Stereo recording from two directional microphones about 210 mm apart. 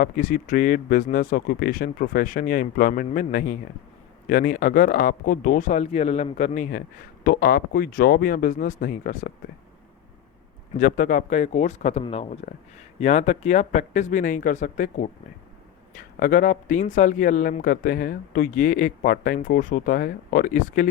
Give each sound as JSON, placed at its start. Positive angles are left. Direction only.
{"t": 0.0, "sound": "speech", "side_deg": 40}
{"t": 10.8, "sound": "speech", "side_deg": 40}